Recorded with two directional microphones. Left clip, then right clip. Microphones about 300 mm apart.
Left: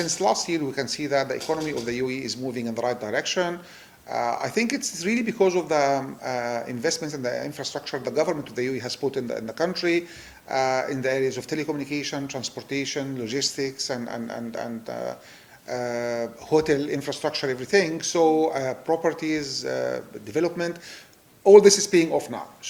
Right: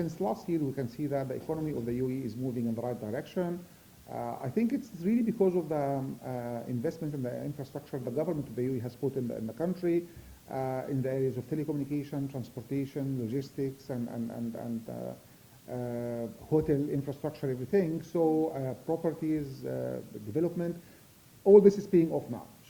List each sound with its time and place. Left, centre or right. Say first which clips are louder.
0.0 s speech: left 11 dB; centre
18.2 s speech: left 8 dB; left
18.5 s speech: left 9 dB; centre